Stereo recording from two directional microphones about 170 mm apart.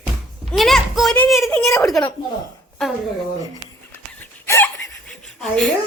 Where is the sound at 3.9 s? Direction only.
15° left (ahead or behind).